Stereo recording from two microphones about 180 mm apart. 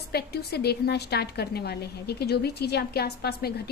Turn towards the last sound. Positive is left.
turn(degrees=60)  # may be behind; listen again after turning